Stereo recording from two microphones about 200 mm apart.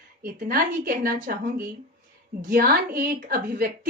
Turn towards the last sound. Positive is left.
turn(degrees=-45)  # may be behind; listen again after turning